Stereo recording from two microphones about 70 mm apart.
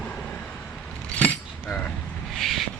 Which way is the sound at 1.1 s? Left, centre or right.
Centre.